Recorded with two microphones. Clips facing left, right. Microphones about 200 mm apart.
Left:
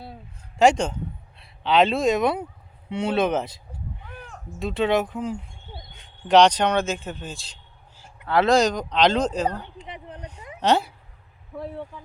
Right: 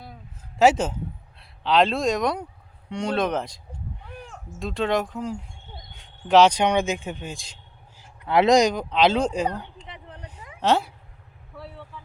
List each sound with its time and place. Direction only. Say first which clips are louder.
0.6 s speech: even; 5° right (ahead or behind)
9.7 s a sound: left 4 dB; 15° left (ahead or behind)
10.6 s speech: left 1 dB; centre (ahead or behind)
11.5 s speech: left 8 dB; 50° left (ahead or behind)